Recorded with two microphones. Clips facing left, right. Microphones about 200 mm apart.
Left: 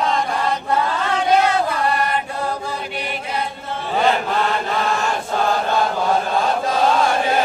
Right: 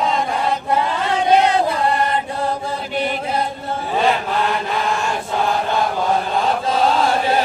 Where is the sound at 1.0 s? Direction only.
20° right (ahead or behind).